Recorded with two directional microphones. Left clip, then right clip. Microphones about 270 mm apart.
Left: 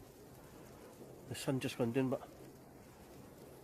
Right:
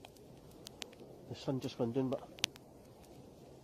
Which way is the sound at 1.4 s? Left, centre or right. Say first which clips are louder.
Even; left.